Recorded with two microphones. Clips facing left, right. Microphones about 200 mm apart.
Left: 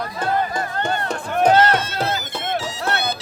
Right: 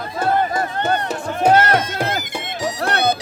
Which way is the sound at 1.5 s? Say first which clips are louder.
Right 1 dB; 10° right (ahead or behind).